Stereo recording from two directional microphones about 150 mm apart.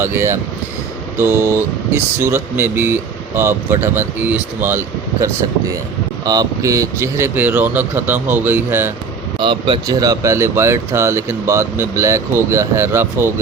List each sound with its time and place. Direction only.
0.0 s speech: 15° right (ahead or behind)
6.2 s speech: 25° right (ahead or behind)
9.4 s speech: 35° right (ahead or behind); by 13.3 s 15° right (ahead or behind)